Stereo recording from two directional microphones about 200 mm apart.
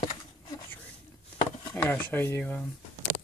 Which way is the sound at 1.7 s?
10° left (ahead or behind).